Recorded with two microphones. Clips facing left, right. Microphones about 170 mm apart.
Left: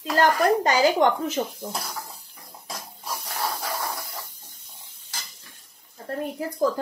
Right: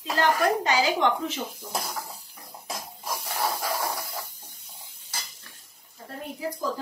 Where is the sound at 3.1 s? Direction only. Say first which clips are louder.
Right 1 dB; 15° right (ahead or behind).